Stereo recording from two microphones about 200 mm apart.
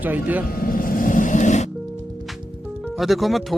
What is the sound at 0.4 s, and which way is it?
Music, 45° left (ahead or behind).